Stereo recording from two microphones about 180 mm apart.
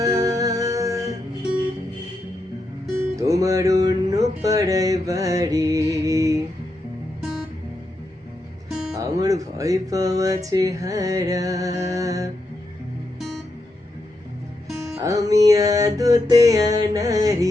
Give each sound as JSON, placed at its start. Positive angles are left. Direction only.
{"t": 0.0, "sound": "music", "side_deg": -20}
{"t": 3.0, "sound": "music", "side_deg": -15}
{"t": 4.4, "sound": "speech", "side_deg": -20}
{"t": 6.1, "sound": "mantra", "side_deg": -20}
{"t": 9.0, "sound": "speech", "side_deg": -20}
{"t": 14.9, "sound": "speech", "side_deg": -20}